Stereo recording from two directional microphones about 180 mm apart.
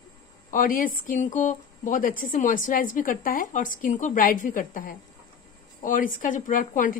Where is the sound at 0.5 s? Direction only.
50° left (ahead or behind).